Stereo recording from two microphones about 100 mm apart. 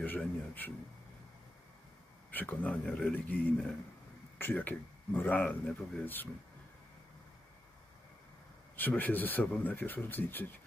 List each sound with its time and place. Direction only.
0.0 s speech: 20° left (ahead or behind)
2.3 s speech: 15° left (ahead or behind)
8.7 s speech: 20° left (ahead or behind)